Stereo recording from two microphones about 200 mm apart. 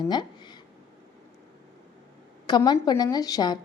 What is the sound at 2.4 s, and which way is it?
A woman's voice, 20° left (ahead or behind).